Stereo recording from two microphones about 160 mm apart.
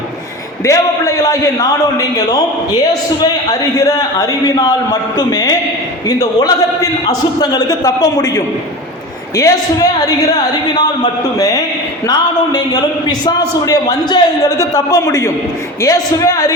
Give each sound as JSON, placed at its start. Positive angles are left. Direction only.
{"t": 0.6, "sound": "a man's voice", "side_deg": 20}
{"t": 9.3, "sound": "a man's voice", "side_deg": 20}